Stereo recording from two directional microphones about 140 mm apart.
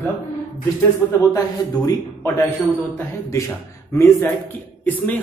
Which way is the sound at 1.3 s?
25° left (ahead or behind).